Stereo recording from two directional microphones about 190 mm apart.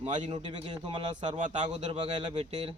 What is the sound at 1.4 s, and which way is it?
Speech, 40° right (ahead or behind).